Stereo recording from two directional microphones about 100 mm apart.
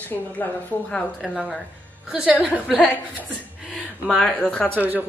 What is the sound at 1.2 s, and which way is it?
Speech, centre (ahead or behind).